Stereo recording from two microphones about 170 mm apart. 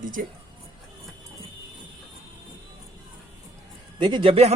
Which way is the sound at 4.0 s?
30° right (ahead or behind).